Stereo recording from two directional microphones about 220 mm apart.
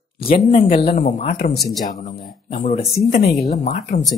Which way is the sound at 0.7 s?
45° left (ahead or behind).